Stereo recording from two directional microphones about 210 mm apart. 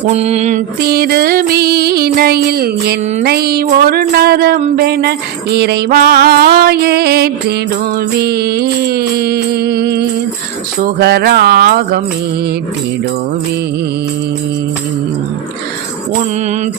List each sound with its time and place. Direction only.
0.1 s mantra: 30° right (ahead or behind)
0.8 s music: 45° right (ahead or behind)